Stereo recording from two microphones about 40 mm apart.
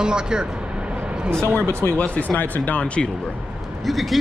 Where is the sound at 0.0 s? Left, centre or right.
Centre.